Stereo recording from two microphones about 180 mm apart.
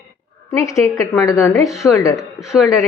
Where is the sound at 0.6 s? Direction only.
15° left (ahead or behind).